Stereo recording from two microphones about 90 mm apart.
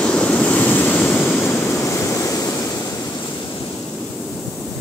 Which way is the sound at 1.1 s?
15° left (ahead or behind).